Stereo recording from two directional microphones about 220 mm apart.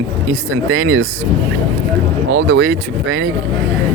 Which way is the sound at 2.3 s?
55° right (ahead or behind).